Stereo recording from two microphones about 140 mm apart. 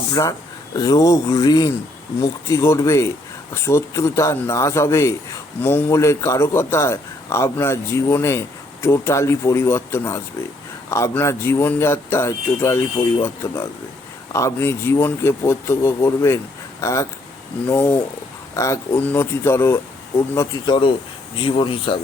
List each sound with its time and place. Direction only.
0.1 s a man's voice: 25° left (ahead or behind)